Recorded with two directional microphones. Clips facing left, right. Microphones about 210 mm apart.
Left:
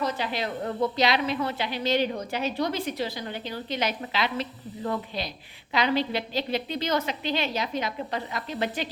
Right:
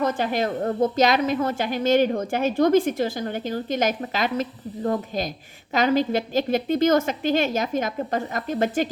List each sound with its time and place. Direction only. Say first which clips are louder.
0.0 s a woman's voice: right 6 dB; 50° right (ahead or behind)